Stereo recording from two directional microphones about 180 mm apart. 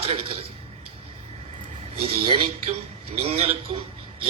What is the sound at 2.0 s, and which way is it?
A man's voice, 30° right (ahead or behind).